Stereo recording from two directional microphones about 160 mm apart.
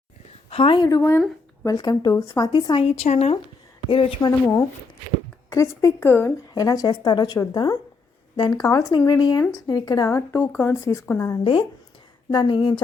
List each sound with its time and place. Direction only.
0.5 s speech: 30° left (ahead or behind)
2.8 s speech: 40° left (ahead or behind)
3.8 s speech: 30° left (ahead or behind)
4.3 s speech: 20° left (ahead or behind)
12.3 s speech: 30° left (ahead or behind)